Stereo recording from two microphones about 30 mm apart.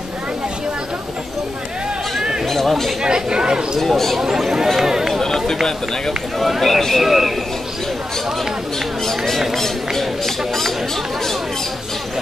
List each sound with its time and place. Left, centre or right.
2.5 s a sound: centre
3.0 s speech: right
3.8 s speech: centre
4.2 s speech: centre
5.2 s run: centre
6.6 s speech: centre
7.0 s speech: centre
9.0 s speech: centre